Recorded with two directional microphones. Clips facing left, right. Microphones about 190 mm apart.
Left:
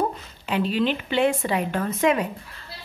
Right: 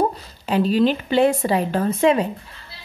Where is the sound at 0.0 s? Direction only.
35° right (ahead or behind).